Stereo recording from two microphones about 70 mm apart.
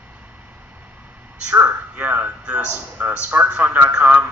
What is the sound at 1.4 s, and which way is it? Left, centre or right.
A man's voice, right.